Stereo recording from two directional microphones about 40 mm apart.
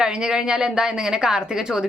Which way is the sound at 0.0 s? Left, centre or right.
Right.